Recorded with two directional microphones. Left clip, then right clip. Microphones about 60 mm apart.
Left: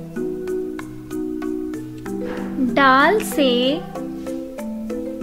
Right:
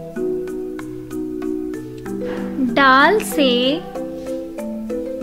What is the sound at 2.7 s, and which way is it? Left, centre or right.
A woman's voice, right.